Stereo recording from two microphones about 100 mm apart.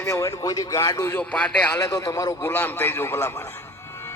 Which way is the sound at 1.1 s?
15° left (ahead or behind).